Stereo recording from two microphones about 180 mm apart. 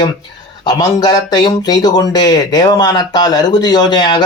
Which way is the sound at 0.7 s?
20° left (ahead or behind).